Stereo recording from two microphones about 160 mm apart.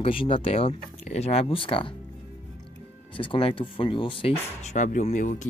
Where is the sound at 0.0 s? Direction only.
35° left (ahead or behind).